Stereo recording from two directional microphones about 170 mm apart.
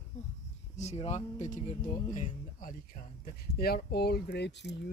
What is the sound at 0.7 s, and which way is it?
Speech, 40° left (ahead or behind).